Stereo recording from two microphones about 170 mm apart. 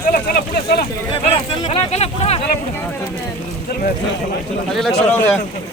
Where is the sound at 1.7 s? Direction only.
40° left (ahead or behind).